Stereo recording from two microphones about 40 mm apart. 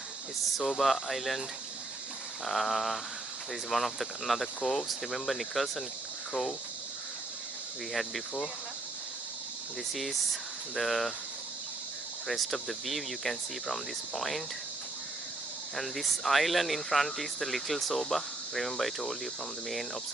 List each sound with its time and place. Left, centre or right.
0.4 s speech: centre
9.9 s speech: centre
12.3 s speech: centre
15.7 s speech: centre